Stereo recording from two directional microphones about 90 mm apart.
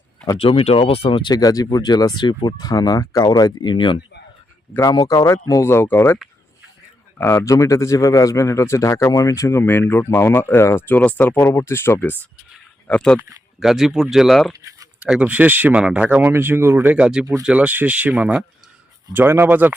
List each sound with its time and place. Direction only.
0.3 s speech: 90° left
1.3 s speech: 45° left (ahead or behind)
2.5 s speech: 45° left (ahead or behind)
4.8 s a man's voice: 45° left (ahead or behind); by 6.1 s 25° left (ahead or behind)
7.2 s a man's voice: 30° left (ahead or behind)
11.3 s speech: 30° left (ahead or behind)
12.9 s speech: 10° left (ahead or behind)
13.6 s speech: 5° right (ahead or behind)
14.5 s speech: 40° right (ahead or behind)
15.1 s speech: 15° right (ahead or behind)
16.9 s speech: 10° right (ahead or behind)
19.1 s speech: 25° right (ahead or behind)